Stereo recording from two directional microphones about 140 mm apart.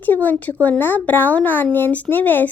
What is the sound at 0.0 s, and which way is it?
A child's voice, 10° left (ahead or behind).